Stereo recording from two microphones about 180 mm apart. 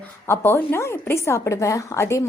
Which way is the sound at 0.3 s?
15° left (ahead or behind).